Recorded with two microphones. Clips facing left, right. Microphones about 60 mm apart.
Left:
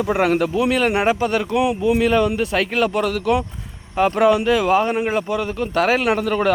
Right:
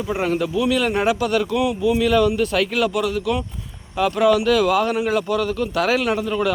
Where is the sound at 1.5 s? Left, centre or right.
Left.